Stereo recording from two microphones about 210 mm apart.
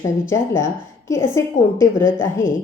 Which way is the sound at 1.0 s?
15° left (ahead or behind).